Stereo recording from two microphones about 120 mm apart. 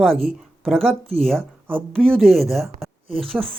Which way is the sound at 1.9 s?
5° left (ahead or behind).